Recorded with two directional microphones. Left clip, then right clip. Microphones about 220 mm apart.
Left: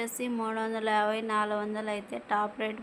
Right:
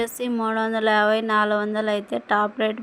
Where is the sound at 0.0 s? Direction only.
25° right (ahead or behind).